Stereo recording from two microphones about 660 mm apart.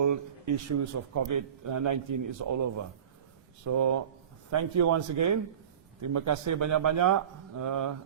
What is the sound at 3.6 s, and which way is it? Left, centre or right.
Speech, right.